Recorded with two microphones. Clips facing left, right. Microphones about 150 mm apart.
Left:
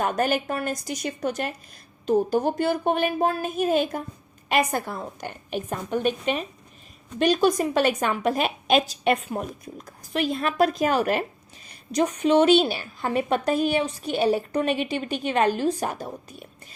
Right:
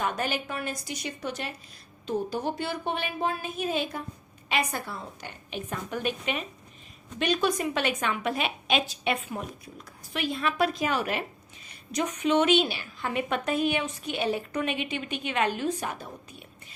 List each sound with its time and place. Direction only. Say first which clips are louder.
0.0 s a woman's voice: left 6 dB; 45° left (ahead or behind)
5.6 s a woman's voice: left 6 dB; 40° left (ahead or behind)